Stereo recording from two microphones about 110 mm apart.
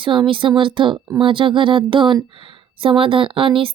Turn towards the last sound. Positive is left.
turn(degrees=-55)  # may be behind; listen again after turning